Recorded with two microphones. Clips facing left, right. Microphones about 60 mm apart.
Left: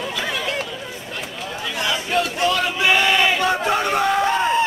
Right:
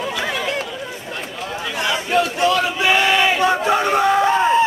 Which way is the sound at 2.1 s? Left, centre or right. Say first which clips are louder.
Right 4 dB; right.